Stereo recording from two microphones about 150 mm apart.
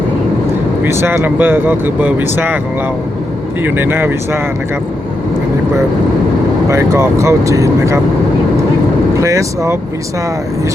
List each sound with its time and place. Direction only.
0.9 s speech: 15° right (ahead or behind)
3.6 s speech: 15° right (ahead or behind)
6.7 s speech: 20° right (ahead or behind)
9.2 s speech: 20° right (ahead or behind)